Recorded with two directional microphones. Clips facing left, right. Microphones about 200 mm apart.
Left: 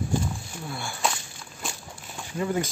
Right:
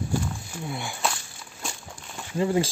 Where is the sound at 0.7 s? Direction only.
20° right (ahead or behind).